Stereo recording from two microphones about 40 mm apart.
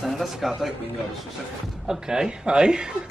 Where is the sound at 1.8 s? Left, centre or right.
Centre.